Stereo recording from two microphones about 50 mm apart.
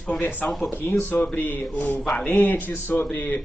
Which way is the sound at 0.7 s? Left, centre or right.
Left.